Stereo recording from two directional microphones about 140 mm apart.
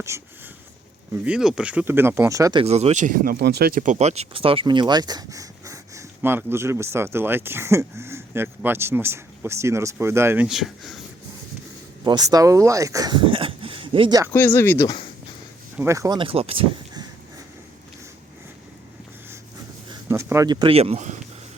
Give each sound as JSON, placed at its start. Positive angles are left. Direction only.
{"t": 0.1, "sound": "speech", "side_deg": -20}
{"t": 1.1, "sound": "speech", "side_deg": -10}
{"t": 2.6, "sound": "speech", "side_deg": -50}
{"t": 10.4, "sound": "speech", "side_deg": 0}
{"t": 12.0, "sound": "speech", "side_deg": -30}
{"t": 14.3, "sound": "speech", "side_deg": 15}
{"t": 15.8, "sound": "speech", "side_deg": -20}
{"t": 16.1, "sound": "speech", "side_deg": -40}
{"t": 19.9, "sound": "a sound", "side_deg": -20}
{"t": 20.5, "sound": "speech", "side_deg": -35}
{"t": 20.7, "sound": "speech", "side_deg": -45}